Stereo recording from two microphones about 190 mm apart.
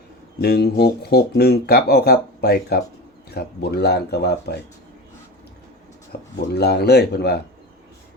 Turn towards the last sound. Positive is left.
turn(degrees=60)  # may be behind; listen again after turning